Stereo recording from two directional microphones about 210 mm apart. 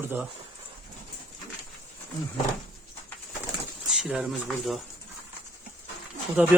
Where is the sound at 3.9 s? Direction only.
Centre (ahead or behind).